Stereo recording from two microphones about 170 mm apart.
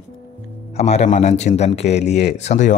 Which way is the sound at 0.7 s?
40° left (ahead or behind).